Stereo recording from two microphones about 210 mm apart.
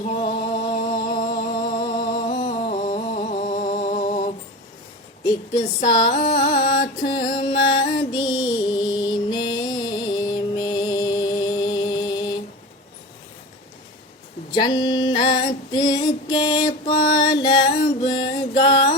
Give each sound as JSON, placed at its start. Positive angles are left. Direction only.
{"t": 0.2, "sound": "music", "side_deg": 25}
{"t": 5.2, "sound": "a sound", "side_deg": 20}
{"t": 7.3, "sound": "music", "side_deg": 20}
{"t": 14.5, "sound": "female singing", "side_deg": 20}
{"t": 17.3, "sound": "a sound", "side_deg": 20}
{"t": 18.0, "sound": "music", "side_deg": 20}